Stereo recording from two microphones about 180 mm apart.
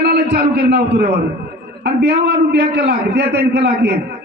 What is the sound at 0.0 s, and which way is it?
A man's voice, 60° right (ahead or behind).